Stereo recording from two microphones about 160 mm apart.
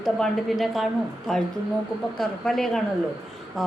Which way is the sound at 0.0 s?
Centre (ahead or behind).